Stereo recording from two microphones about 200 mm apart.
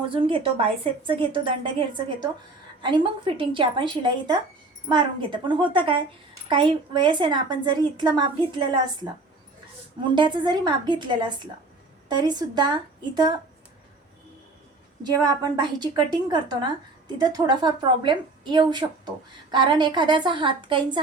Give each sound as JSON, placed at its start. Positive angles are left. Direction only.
{"t": 0.0, "sound": "a woman's voice", "side_deg": -25}
{"t": 10.0, "sound": "a woman's voice", "side_deg": -25}
{"t": 15.0, "sound": "a woman's voice", "side_deg": -20}